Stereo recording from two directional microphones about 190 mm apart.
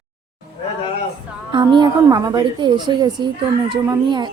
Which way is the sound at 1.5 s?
25° right (ahead or behind).